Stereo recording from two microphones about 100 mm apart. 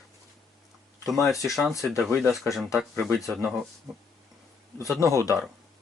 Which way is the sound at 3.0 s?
Centre (ahead or behind).